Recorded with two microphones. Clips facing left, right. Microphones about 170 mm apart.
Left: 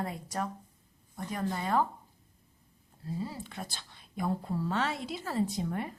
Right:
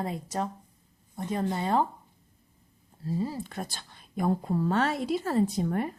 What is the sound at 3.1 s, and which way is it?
A woman's voice, 40° right (ahead or behind).